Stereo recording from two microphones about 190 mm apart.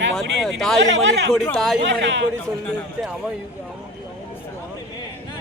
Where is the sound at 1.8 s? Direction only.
70° right (ahead or behind).